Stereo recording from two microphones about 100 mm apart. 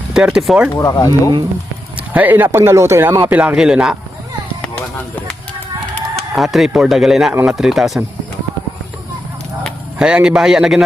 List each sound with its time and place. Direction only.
0.1 s a man's voice: 5° right (ahead or behind)
0.8 s speech: 35° left (ahead or behind)
2.1 s speech: 20° right (ahead or behind)
6.1 s speech: centre (ahead or behind)
10.0 s a man's voice: 10° right (ahead or behind)